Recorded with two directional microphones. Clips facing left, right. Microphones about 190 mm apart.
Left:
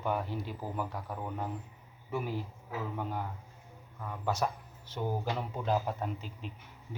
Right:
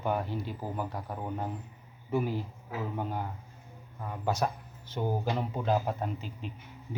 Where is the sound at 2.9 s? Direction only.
30° right (ahead or behind).